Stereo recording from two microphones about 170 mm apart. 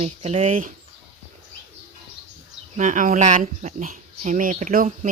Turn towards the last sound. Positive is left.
turn(degrees=-50)  # may be behind; listen again after turning